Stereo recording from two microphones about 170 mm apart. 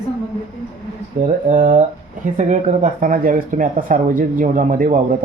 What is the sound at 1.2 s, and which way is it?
Speech, 50° right (ahead or behind).